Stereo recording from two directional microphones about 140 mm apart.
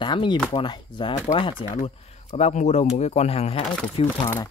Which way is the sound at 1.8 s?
45° left (ahead or behind).